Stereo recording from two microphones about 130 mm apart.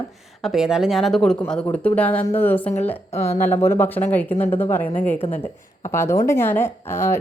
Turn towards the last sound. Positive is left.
turn(degrees=20)  # may be behind; listen again after turning